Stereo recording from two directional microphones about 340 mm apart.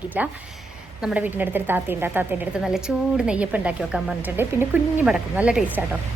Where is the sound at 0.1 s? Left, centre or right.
Centre.